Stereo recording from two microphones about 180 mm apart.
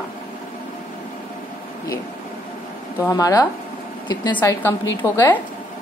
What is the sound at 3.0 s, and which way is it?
A woman's voice, 20° left (ahead or behind).